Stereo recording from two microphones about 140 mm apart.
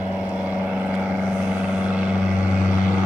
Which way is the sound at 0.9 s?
10° right (ahead or behind).